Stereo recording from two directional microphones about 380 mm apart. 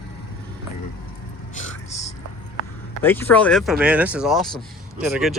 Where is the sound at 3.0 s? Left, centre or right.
Centre.